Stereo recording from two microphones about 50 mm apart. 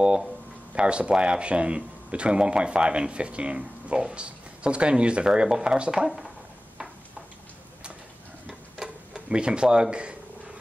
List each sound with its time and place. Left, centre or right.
0.7 s speech: right
6.0 s speech: centre
8.8 s speech: centre